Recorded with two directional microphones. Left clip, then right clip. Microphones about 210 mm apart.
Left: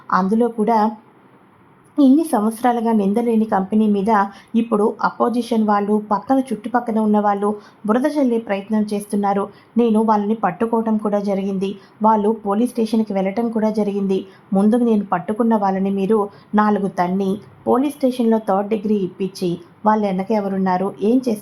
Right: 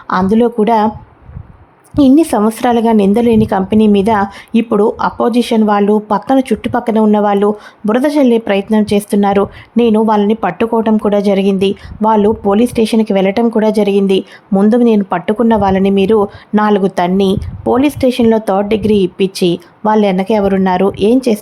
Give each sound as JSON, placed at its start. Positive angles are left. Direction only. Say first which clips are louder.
{"t": 0.1, "sound": "a woman's voice", "louder": "right 6 dB", "side_deg": -35}
{"t": 2.1, "sound": "a woman's voice", "louder": "right 7 dB", "side_deg": -35}